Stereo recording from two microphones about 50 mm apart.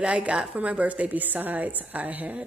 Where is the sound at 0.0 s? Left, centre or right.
Right.